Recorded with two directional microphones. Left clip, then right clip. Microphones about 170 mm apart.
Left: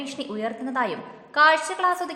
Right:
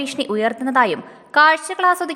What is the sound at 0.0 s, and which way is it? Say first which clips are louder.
A woman's voice: right 10 dB; 45° right (ahead or behind).